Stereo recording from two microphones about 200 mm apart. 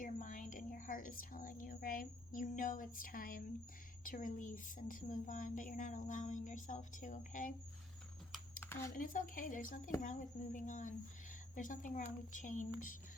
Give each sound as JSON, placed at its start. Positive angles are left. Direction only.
{"t": 0.0, "sound": "a woman's voice", "side_deg": 40}
{"t": 8.6, "sound": "a sound", "side_deg": 10}
{"t": 9.0, "sound": "a woman's voice", "side_deg": 45}